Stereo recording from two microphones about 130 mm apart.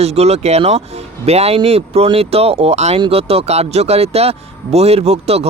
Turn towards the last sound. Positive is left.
turn(degrees=-55)  # may be behind; listen again after turning